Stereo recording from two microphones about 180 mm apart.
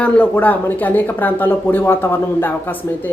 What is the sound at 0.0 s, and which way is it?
Speech, 10° left (ahead or behind).